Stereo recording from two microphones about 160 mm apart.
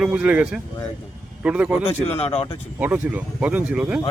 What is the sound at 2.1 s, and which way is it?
Speech, 40° left (ahead or behind).